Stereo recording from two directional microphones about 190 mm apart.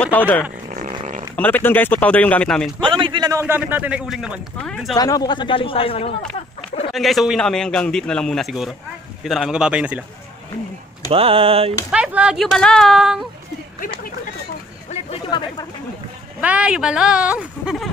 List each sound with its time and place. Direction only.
0.0 s speech: 10° left (ahead or behind)
0.7 s a sound: 45° right (ahead or behind)
1.3 s speech: 10° left (ahead or behind)
2.8 s a man's voice: 25° right (ahead or behind); by 4.9 s centre (ahead or behind)
4.9 s speech: 20° left (ahead or behind)
6.9 s a man's voice: centre (ahead or behind)
11.1 s a sound: 30° right (ahead or behind)
11.9 s a man's voice: 5° right (ahead or behind)
14.9 s chatter: 30° left (ahead or behind)
16.3 s a man's voice: 5° right (ahead or behind)